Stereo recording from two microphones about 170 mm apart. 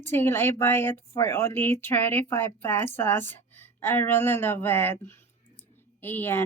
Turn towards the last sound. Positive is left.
turn(degrees=10)  # may be behind; listen again after turning